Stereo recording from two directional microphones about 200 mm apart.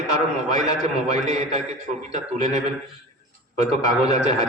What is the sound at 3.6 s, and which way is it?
Speech, 35° right (ahead or behind).